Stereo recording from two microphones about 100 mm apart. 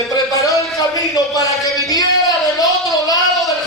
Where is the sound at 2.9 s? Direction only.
35° left (ahead or behind).